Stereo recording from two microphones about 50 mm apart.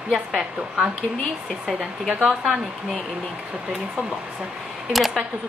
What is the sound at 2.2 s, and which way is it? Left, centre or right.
Speech, centre.